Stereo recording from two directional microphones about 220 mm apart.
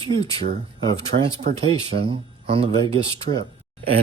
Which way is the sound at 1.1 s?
40° right (ahead or behind).